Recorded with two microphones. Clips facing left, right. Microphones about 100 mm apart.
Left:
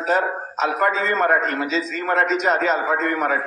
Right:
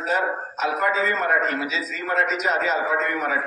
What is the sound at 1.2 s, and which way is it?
Speech, 50° left (ahead or behind).